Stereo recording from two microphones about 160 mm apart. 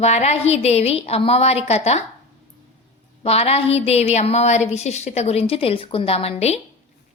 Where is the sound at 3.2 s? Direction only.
40° left (ahead or behind).